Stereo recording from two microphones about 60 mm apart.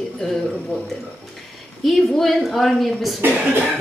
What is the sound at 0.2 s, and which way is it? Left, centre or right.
A woman's voice, centre.